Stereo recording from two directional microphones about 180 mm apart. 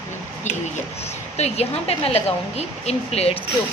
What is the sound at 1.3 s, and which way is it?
A woman's voice, 35° left (ahead or behind).